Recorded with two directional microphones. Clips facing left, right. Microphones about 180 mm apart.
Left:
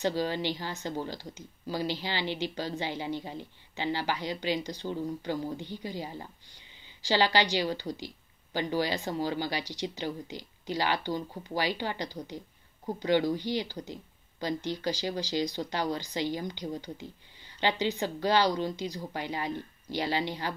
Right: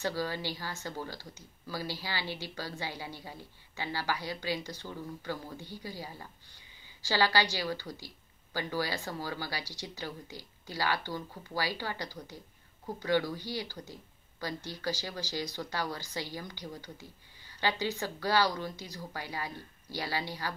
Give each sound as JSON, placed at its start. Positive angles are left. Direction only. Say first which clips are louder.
{"t": 0.0, "sound": "speech", "louder": "left 5 dB", "side_deg": 20}